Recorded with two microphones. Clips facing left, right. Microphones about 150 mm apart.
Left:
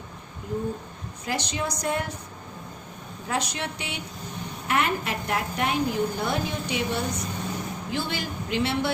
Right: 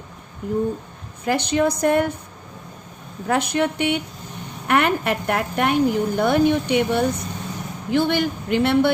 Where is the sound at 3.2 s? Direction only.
60° right (ahead or behind).